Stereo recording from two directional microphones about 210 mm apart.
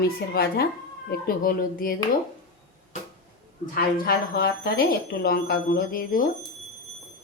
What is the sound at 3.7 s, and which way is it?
Speech, 45° left (ahead or behind).